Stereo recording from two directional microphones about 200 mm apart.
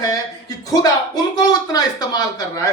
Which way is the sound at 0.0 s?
20° left (ahead or behind).